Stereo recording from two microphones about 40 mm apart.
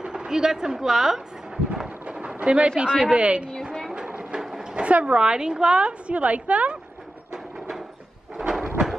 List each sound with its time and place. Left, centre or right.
0.0 s speech: right
2.0 s a sound: right
2.4 s a woman's voice: right
4.1 s train: right
4.4 s train: centre
4.8 s a woman's voice: right
5.8 s a woman's voice: right
8.4 s a sound: centre